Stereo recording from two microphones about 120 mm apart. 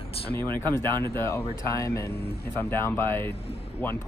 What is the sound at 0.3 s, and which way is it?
Speech, 20° left (ahead or behind).